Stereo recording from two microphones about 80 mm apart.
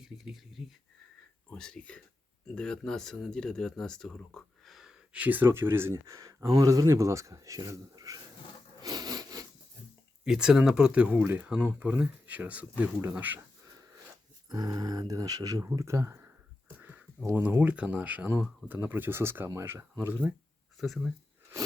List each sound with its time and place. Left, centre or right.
0.0 s speech: centre
1.5 s speech: centre
5.1 s speech: right
5.5 s speech: right
8.8 s sawing: right
10.2 s speech: centre
11.2 s speech: right
11.4 s speech: centre
14.5 s speech: right
15.7 s a sound: right
17.2 s speech: right
20.7 s speech: centre